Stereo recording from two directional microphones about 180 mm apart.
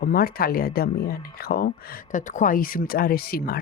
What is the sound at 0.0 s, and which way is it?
Speech, 55° left (ahead or behind).